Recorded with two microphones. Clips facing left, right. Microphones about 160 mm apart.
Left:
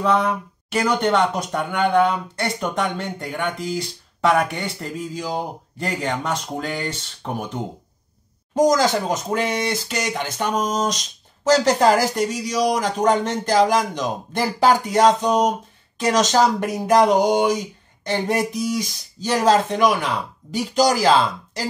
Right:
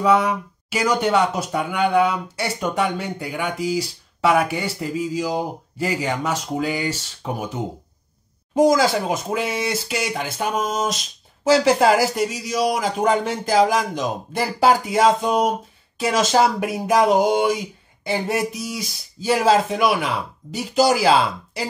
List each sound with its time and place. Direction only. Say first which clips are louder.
0.0 s speech: right 2 dB; 5° right (ahead or behind)